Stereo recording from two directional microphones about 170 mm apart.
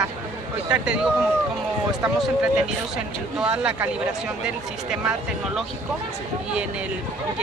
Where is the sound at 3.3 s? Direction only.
5° right (ahead or behind).